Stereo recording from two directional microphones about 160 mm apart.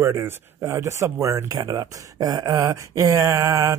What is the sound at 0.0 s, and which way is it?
Speech, 15° right (ahead or behind).